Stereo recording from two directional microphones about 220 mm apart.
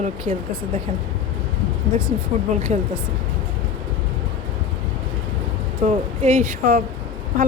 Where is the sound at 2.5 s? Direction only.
30° right (ahead or behind).